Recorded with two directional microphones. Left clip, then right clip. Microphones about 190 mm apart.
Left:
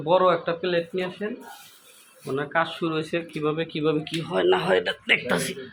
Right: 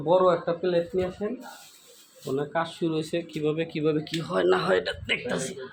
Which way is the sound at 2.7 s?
10° right (ahead or behind).